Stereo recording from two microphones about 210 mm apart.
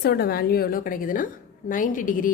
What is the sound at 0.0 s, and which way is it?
A woman's voice, 45° left (ahead or behind).